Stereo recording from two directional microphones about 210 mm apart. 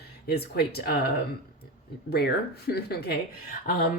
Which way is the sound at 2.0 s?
50° left (ahead or behind).